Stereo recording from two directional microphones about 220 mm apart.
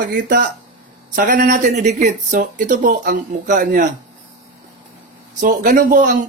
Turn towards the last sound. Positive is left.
turn(degrees=-35)  # may be behind; listen again after turning